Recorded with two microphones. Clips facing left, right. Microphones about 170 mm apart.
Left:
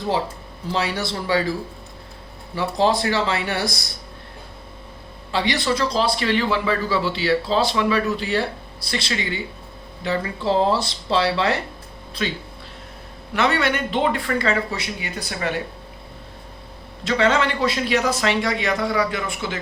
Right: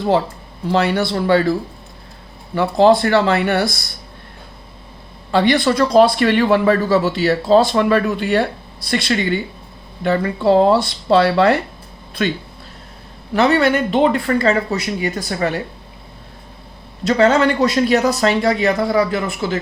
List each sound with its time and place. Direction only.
0.7 s speech: 60° right (ahead or behind)
2.6 s speech: 60° right (ahead or behind)
5.3 s a man's voice: 50° right (ahead or behind)
13.3 s a man's voice: 40° right (ahead or behind)
17.0 s a man's voice: 40° right (ahead or behind)